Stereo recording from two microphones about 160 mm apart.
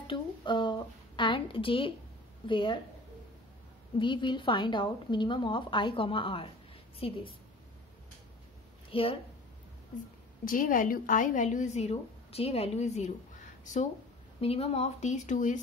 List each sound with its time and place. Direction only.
0.0 s a woman's voice: 30° left (ahead or behind)
4.0 s a woman's voice: 30° left (ahead or behind)
8.9 s a woman's voice: 35° left (ahead or behind)
10.4 s a woman's voice: 60° left (ahead or behind)
14.4 s a woman's voice: 40° left (ahead or behind)